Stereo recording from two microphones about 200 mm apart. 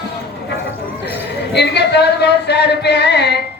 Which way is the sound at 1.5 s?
55° left (ahead or behind).